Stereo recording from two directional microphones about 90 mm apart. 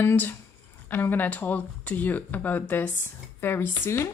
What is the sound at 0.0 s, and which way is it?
Speech, 20° left (ahead or behind).